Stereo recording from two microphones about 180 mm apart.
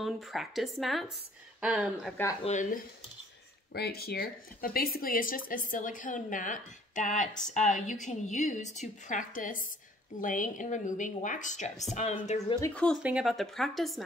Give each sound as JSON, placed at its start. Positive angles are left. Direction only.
{"t": 0.0, "sound": "speech", "side_deg": 0}
{"t": 2.4, "sound": "speech", "side_deg": 45}
{"t": 3.7, "sound": "speech", "side_deg": 60}
{"t": 13.0, "sound": "speech", "side_deg": -5}